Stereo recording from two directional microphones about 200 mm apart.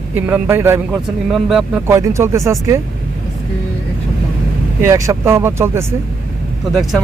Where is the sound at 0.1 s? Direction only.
10° right (ahead or behind).